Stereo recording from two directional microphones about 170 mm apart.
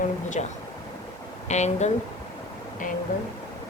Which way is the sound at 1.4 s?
40° left (ahead or behind).